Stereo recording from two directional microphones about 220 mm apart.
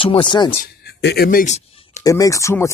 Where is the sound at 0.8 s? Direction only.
50° left (ahead or behind).